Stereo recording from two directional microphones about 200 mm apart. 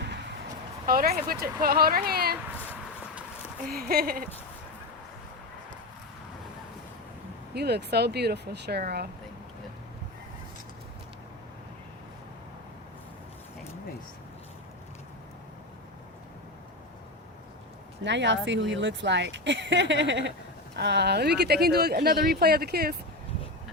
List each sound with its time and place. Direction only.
0.9 s speech: 45° right (ahead or behind)
3.7 s speech: 50° right (ahead or behind)
7.5 s speech: 55° right (ahead or behind)
18.0 s speech: 60° right (ahead or behind)